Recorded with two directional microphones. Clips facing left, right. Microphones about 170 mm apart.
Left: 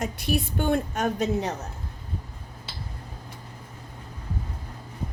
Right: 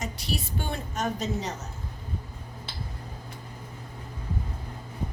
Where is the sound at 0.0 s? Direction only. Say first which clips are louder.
Left 6 dB; 55° left (ahead or behind).